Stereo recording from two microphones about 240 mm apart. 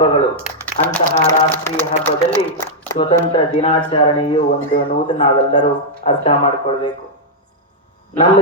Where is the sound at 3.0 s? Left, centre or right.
Left.